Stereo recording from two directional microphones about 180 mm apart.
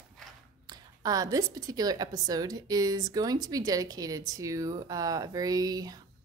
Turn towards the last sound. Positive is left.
turn(degrees=-20)  # may be behind; listen again after turning